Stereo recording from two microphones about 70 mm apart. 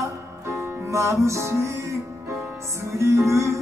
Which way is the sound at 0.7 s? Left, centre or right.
Right.